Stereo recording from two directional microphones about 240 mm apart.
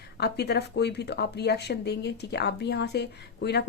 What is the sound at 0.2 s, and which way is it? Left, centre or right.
Speech, left.